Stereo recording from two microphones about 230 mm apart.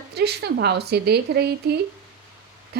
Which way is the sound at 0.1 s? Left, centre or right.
Right.